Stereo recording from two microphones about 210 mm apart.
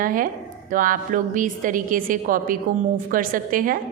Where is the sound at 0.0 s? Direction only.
40° right (ahead or behind).